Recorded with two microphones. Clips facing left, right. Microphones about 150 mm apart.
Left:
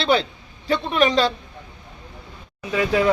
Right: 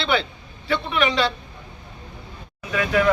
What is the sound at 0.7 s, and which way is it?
Speech, 40° left (ahead or behind).